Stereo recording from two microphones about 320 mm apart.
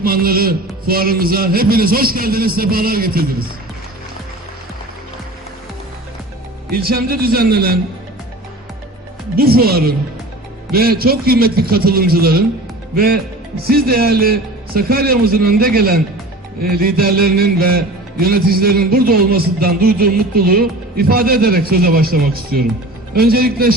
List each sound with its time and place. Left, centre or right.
0.0 s music: right
6.7 s music: right
9.3 s music: right
13.7 s music: right